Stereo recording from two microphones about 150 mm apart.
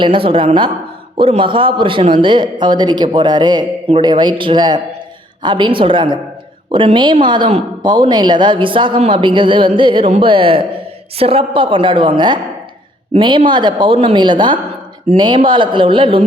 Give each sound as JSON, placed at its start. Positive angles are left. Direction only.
{"t": 0.0, "sound": "speech", "side_deg": -35}